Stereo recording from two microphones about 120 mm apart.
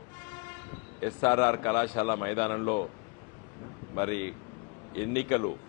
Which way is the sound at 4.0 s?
20° left (ahead or behind).